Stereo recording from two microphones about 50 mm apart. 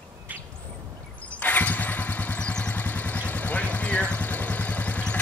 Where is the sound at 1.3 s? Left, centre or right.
Left.